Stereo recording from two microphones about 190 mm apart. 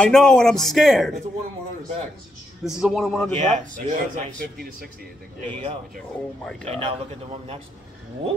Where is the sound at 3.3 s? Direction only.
45° right (ahead or behind).